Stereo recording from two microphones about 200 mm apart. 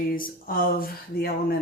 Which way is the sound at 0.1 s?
45° left (ahead or behind).